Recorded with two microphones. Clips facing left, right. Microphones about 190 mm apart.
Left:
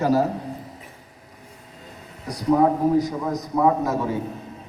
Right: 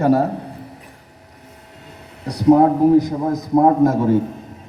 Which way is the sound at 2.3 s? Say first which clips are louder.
Right 6 dB; 65° right (ahead or behind).